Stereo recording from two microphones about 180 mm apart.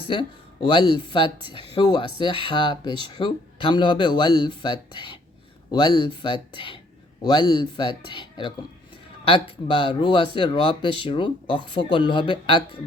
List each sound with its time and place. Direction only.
0.1 s speech: 25° left (ahead or behind)